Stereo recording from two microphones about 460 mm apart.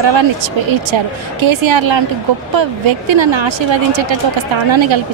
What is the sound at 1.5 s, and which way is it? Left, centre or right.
A woman's voice, right.